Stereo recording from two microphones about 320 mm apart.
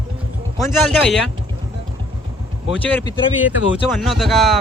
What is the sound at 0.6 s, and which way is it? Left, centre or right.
Speech, centre.